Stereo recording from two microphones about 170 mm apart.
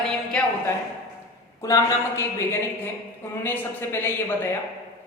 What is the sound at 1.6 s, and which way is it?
A man's voice, 20° left (ahead or behind).